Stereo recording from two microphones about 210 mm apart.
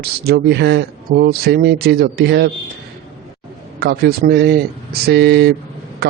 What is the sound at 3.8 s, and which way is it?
A man's voice, 50° right (ahead or behind).